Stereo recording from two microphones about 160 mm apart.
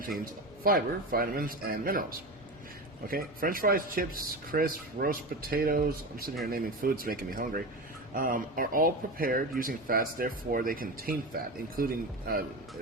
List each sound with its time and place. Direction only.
0.6 s speech: 65° right (ahead or behind)